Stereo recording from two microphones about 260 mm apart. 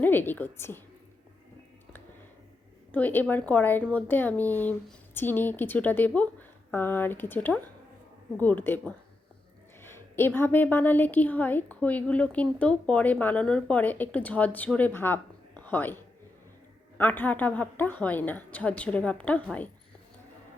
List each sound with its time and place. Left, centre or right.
0.0 s a woman's voice: centre
2.9 s a woman's voice: centre
17.0 s a woman's voice: centre